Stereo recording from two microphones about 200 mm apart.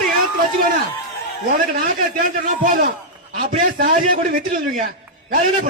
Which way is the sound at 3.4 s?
40° right (ahead or behind).